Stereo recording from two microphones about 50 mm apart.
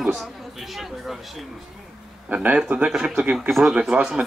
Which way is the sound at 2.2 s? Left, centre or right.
Right.